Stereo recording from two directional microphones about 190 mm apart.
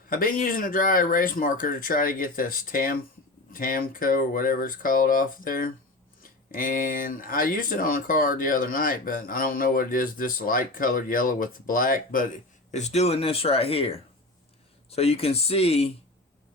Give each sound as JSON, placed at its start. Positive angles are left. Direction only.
{"t": 0.1, "sound": "speech", "side_deg": 50}
{"t": 12.7, "sound": "speech", "side_deg": 35}